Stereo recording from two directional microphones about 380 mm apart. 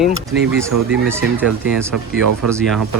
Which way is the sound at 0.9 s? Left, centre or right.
Centre.